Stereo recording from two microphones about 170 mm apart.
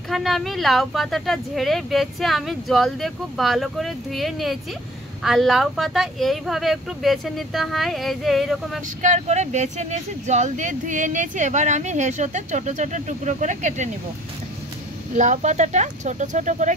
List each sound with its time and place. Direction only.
0.1 s speech: centre (ahead or behind)
9.0 s speech: 45° right (ahead or behind)
15.1 s speech: 45° right (ahead or behind)